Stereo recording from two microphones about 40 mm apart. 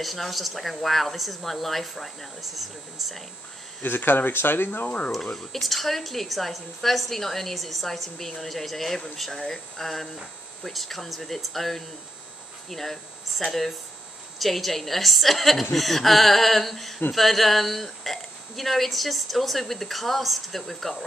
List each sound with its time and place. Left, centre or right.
0.0 s speech: centre
3.8 s speech: left
4.8 s speech: left
5.1 s speech: centre
9.1 s a sound: centre
10.6 s speech: centre